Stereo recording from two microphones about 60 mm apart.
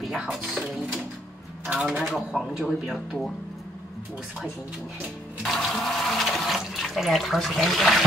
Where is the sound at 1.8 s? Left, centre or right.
Centre.